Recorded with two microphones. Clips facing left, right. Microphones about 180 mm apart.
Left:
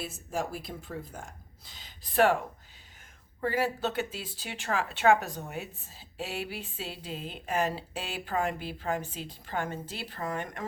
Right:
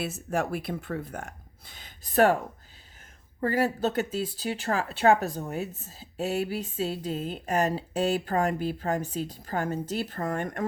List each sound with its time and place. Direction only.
0.0 s speech: 70° right (ahead or behind); by 2.3 s 45° right (ahead or behind)
3.4 s speech: 40° right (ahead or behind)